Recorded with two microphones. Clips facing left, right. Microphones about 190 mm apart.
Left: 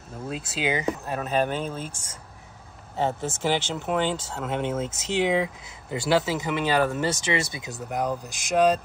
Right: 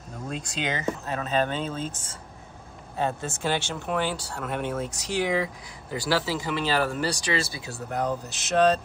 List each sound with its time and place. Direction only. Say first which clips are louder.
0.3 s speech: left 3 dB; 5° left (ahead or behind)
3.4 s speech: left 2 dB; 20° left (ahead or behind)